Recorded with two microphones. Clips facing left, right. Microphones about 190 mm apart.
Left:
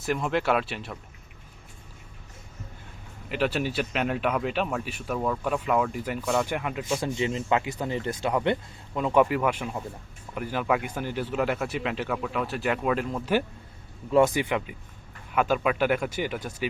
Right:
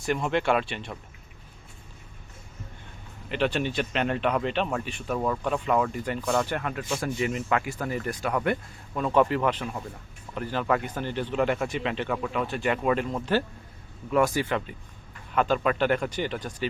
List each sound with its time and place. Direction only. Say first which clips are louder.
0.0 s speech: even; centre (ahead or behind)
3.2 s speech: even; 5° left (ahead or behind)
7.0 s speech: even; 25° left (ahead or behind); by 13.3 s centre (ahead or behind)
14.1 s speech: left 2 dB; 20° left (ahead or behind)